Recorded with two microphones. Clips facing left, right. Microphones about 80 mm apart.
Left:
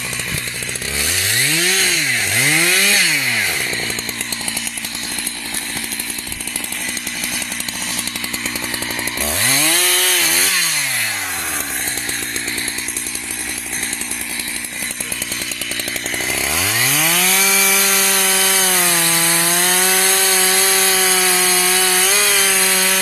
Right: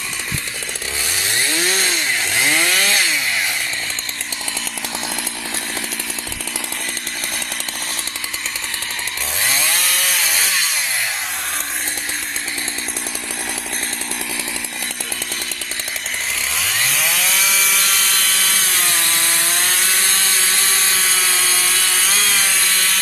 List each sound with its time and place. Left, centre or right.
1.5 s chainsaw: right
2.3 s chainsaw: centre
9.2 s chainsaw: centre
16.5 s chainsaw: centre
19.7 s wood: centre